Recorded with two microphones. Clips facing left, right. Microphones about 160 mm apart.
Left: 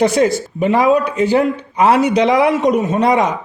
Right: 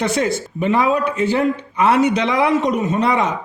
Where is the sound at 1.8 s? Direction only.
35° left (ahead or behind).